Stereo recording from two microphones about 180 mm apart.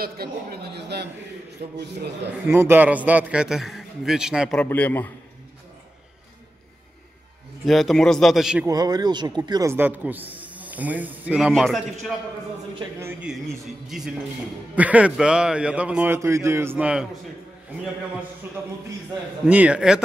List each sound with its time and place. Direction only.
0.0 s speech: 60° right (ahead or behind)
2.4 s a man's voice: 10° right (ahead or behind)
4.6 s a man's voice: 10° left (ahead or behind)
7.6 s a man's voice: centre (ahead or behind)
8.6 s speech: 20° right (ahead or behind); by 11.8 s centre (ahead or behind)
13.0 s a man's voice: 10° right (ahead or behind)
19.4 s a man's voice: 5° right (ahead or behind)